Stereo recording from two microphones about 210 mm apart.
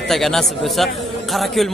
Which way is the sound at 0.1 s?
Centre (ahead or behind).